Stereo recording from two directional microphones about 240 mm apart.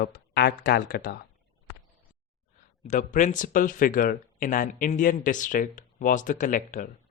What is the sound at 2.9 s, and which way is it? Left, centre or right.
Speech, left.